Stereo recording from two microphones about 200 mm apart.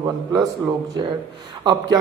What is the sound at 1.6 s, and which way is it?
Speech, 20° right (ahead or behind).